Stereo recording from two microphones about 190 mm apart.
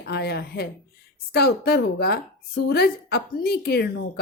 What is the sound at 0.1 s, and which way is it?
Speech, 60° left (ahead or behind).